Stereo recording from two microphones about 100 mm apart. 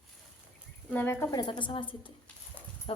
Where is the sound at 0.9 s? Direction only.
20° left (ahead or behind).